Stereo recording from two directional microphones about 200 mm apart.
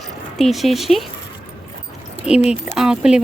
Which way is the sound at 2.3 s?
35° left (ahead or behind).